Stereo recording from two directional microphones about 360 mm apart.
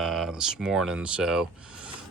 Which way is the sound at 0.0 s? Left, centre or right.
Centre.